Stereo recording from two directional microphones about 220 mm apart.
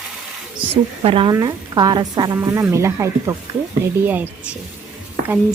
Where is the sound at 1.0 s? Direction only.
25° right (ahead or behind).